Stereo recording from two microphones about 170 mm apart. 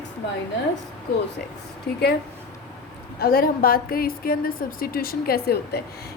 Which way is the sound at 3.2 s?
60° left (ahead or behind).